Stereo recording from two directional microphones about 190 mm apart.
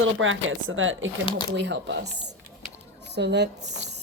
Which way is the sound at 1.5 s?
70° right (ahead or behind).